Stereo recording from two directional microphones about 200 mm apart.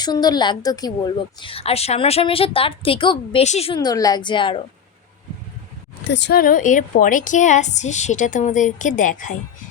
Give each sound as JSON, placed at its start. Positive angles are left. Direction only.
{"t": 0.0, "sound": "a woman's voice", "side_deg": 20}
{"t": 3.8, "sound": "a woman's voice", "side_deg": 20}
{"t": 6.1, "sound": "a woman's voice", "side_deg": 60}